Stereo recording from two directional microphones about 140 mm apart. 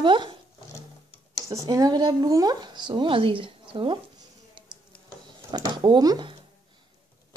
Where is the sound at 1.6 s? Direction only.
30° right (ahead or behind).